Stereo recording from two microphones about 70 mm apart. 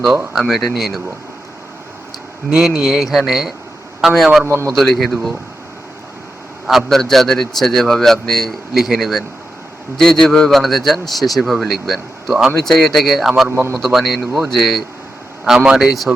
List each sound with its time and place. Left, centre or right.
0.0 s a man's voice: centre
2.6 s a man's voice: centre
4.4 s a man's voice: right
4.7 s a man's voice: centre
6.7 s a man's voice: centre
13.5 s a man's voice: right
13.8 s a man's voice: centre
15.4 s speech: centre